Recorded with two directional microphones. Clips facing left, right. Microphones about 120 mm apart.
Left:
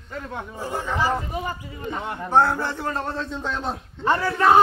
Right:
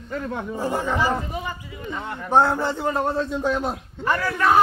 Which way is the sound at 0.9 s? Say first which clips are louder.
Even; 40° left (ahead or behind).